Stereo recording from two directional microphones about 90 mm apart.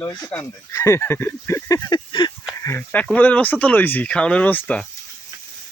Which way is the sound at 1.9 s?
55° left (ahead or behind).